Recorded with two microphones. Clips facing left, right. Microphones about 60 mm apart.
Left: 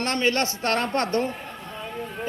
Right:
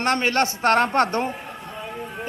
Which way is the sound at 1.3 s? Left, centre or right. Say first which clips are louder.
Right 2 dB; centre.